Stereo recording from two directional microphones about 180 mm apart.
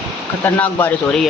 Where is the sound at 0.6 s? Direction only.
10° left (ahead or behind).